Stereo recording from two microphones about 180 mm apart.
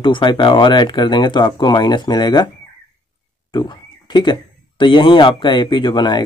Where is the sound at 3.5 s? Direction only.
25° left (ahead or behind).